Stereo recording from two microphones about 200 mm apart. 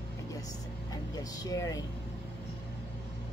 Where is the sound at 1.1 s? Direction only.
20° left (ahead or behind).